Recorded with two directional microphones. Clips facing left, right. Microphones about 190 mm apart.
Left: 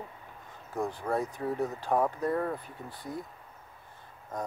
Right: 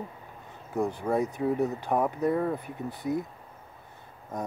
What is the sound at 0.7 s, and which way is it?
Speech, 10° right (ahead or behind).